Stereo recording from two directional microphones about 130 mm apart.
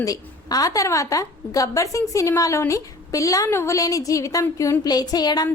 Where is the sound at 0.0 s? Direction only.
30° left (ahead or behind).